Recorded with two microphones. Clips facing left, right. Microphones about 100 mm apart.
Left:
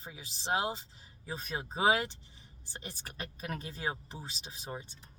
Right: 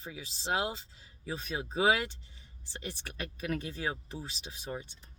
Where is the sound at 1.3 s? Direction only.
35° left (ahead or behind).